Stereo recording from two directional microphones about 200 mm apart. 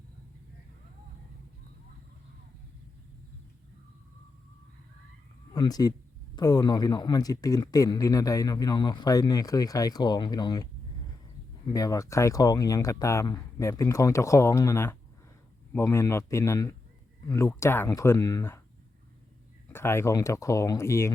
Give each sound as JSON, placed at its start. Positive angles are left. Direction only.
{"t": 5.5, "sound": "speech", "side_deg": 20}
{"t": 11.7, "sound": "speech", "side_deg": 15}
{"t": 19.7, "sound": "speech", "side_deg": 10}